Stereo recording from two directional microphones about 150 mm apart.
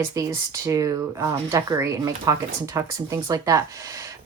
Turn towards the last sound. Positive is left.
turn(degrees=-20)  # may be behind; listen again after turning